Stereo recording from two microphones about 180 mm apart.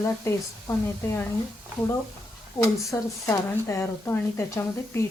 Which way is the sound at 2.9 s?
15° left (ahead or behind).